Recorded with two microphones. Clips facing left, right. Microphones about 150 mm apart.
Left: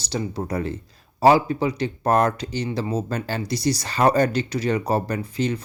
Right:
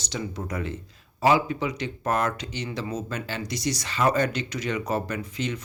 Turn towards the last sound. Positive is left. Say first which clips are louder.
# left 6 dB
turn(degrees=35)  # may be behind; listen again after turning